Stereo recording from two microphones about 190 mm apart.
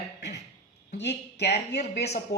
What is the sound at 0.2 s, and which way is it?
Beatboxing, 65° left (ahead or behind).